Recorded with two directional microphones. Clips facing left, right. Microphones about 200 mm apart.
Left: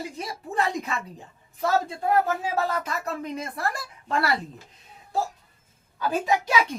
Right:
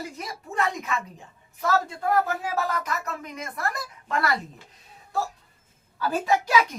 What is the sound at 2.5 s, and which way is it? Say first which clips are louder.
A woman's voice: left 1 dB; 30° left (ahead or behind).